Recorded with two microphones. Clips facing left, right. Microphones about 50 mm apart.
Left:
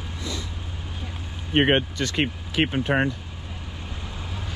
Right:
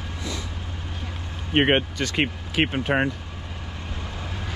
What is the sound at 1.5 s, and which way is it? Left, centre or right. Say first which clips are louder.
Speech: even; right.